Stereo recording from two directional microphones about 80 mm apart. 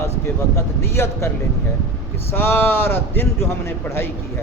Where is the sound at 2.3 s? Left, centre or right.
Left.